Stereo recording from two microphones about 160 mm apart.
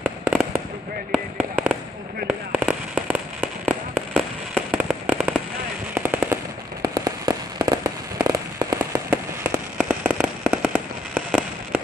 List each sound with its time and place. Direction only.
0.0 s fireworks: 10° right (ahead or behind)
1.1 s speech: centre (ahead or behind)
2.2 s fireworks: 5° right (ahead or behind)
5.9 s machine gun: 15° right (ahead or behind)
6.8 s fireworks: 25° right (ahead or behind)
9.8 s fireworks: 10° right (ahead or behind)